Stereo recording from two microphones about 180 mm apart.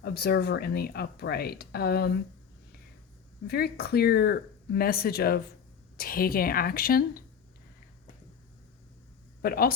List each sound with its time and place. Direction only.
0.0 s speech: 60° left (ahead or behind)
3.4 s speech: 60° left (ahead or behind)
9.4 s speech: 55° left (ahead or behind)